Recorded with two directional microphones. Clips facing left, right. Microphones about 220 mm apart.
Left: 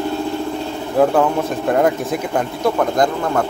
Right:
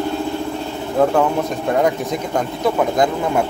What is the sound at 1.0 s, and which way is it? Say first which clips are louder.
Speech: left 1 dB; 5° left (ahead or behind).